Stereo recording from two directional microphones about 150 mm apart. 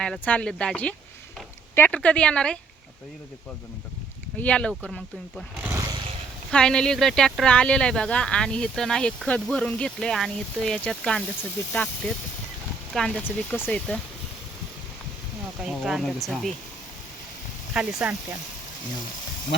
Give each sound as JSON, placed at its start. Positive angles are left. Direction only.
{"t": 0.0, "sound": "a woman's voice", "side_deg": 5}
{"t": 4.4, "sound": "a woman's voice", "side_deg": 10}
{"t": 5.6, "sound": "vehicle", "side_deg": -25}
{"t": 6.5, "sound": "a woman's voice", "side_deg": 5}
{"t": 15.6, "sound": "speech", "side_deg": 0}
{"t": 17.7, "sound": "speech", "side_deg": -10}